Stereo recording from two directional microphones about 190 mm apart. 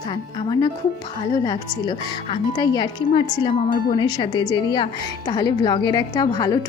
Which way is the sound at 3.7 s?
45° left (ahead or behind).